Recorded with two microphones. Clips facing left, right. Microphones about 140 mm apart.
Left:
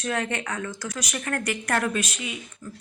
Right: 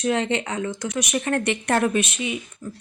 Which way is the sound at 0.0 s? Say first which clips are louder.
Right 6 dB; 20° right (ahead or behind).